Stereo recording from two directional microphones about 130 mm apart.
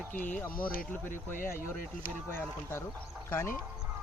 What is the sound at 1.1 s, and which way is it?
Speech, 90° left.